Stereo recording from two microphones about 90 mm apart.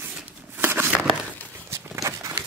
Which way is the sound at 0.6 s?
25° right (ahead or behind).